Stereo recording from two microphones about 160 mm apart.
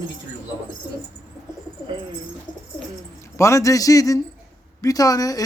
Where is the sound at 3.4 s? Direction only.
20° left (ahead or behind).